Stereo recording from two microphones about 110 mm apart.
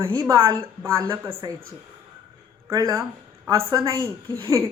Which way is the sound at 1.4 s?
35° right (ahead or behind).